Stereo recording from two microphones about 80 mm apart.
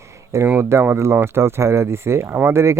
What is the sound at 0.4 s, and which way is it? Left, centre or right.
Speech, right.